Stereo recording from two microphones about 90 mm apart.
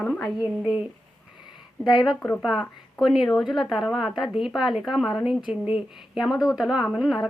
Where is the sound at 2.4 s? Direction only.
5° right (ahead or behind).